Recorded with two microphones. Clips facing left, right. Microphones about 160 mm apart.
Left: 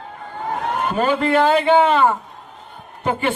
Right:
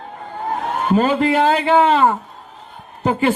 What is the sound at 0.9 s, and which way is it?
A man's voice, 35° right (ahead or behind).